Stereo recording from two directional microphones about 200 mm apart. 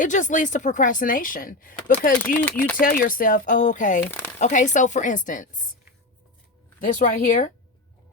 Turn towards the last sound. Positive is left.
turn(degrees=40)  # may be behind; listen again after turning